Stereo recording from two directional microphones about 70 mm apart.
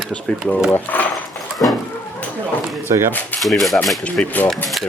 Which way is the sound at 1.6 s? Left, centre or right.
Left.